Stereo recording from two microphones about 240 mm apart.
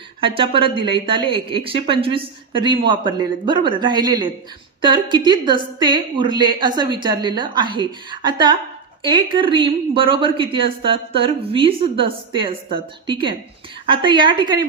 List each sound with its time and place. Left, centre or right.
0.2 s a woman's voice: right